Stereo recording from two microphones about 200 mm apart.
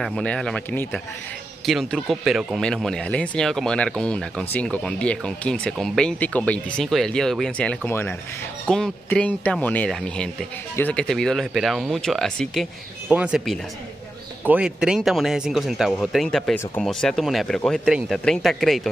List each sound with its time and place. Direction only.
0.0 s speech: 5° left (ahead or behind)